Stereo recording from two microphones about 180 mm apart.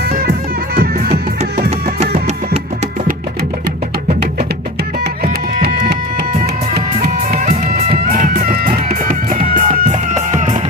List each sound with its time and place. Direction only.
0.8 s music: 60° right (ahead or behind)
5.2 s music: 55° right (ahead or behind)